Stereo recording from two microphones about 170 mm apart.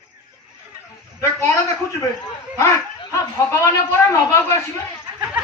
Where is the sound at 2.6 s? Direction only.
15° left (ahead or behind).